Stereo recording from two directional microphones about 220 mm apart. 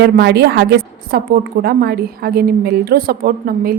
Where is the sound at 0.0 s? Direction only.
50° right (ahead or behind).